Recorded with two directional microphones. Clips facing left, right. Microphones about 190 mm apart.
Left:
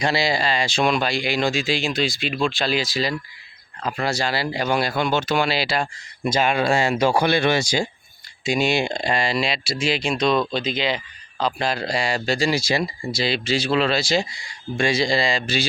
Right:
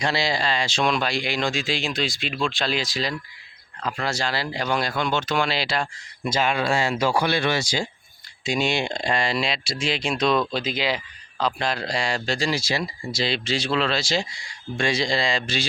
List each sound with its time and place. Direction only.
0.0 s a man's voice: 10° left (ahead or behind)
6.4 s speech: 50° left (ahead or behind)
6.9 s a man's voice: 20° left (ahead or behind)